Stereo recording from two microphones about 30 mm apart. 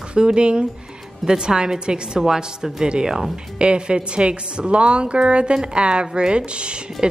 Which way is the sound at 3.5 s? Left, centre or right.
Right.